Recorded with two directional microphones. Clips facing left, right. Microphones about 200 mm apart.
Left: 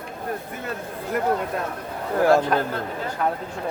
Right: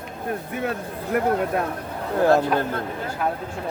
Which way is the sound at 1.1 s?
60° right (ahead or behind).